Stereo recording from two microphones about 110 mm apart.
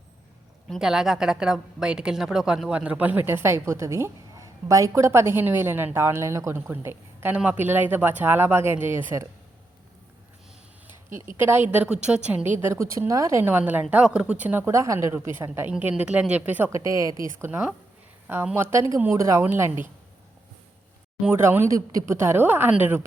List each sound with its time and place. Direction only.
0.7 s a woman's voice: 5° right (ahead or behind); by 9.2 s 20° right (ahead or behind)
11.1 s a woman's voice: 20° right (ahead or behind)
18.3 s a woman's voice: 20° right (ahead or behind)
21.2 s a woman's voice: 20° right (ahead or behind)